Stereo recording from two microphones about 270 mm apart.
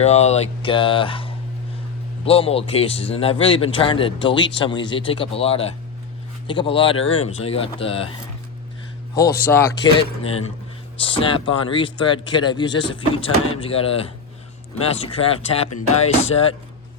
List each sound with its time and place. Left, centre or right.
0.0 s a man's voice: left
9.1 s speech: centre
11.0 s a man's voice: centre